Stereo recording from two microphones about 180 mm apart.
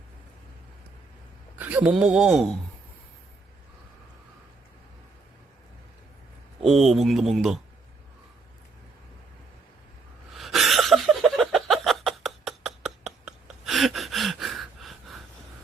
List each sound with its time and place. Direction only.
1.5 s speech: 10° right (ahead or behind)
6.6 s speech: centre (ahead or behind)
10.3 s a sound: centre (ahead or behind)